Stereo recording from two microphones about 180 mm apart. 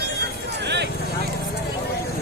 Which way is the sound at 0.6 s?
70° right (ahead or behind).